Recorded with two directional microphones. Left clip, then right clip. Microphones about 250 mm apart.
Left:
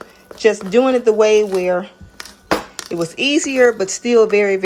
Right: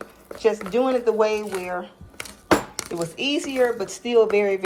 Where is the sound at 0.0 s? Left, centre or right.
Left.